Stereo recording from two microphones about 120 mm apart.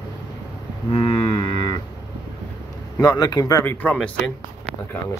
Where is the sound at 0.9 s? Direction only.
50° left (ahead or behind).